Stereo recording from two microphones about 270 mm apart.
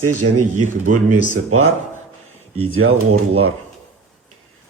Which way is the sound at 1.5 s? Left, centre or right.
Right.